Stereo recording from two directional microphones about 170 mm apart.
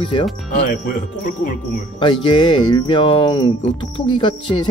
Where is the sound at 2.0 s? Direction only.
30° left (ahead or behind).